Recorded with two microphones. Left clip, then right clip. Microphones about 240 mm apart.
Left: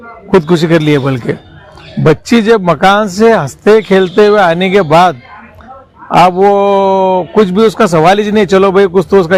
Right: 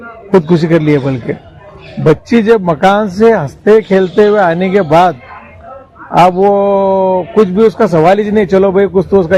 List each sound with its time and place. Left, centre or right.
0.3 s a man's voice: left